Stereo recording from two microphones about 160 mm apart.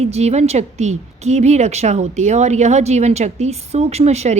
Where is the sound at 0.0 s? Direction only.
40° right (ahead or behind).